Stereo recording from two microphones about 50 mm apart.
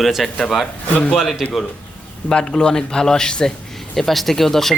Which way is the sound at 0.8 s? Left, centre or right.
Left.